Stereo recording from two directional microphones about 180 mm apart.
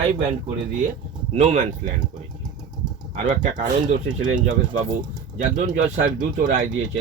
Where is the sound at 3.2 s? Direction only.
45° right (ahead or behind).